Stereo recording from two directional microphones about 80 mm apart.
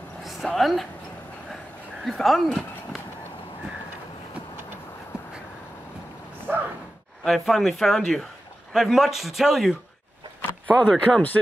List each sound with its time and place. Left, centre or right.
0.2 s speech: centre
2.0 s speech: centre
6.5 s sigh: right
7.2 s a man's voice: centre
10.8 s speech: centre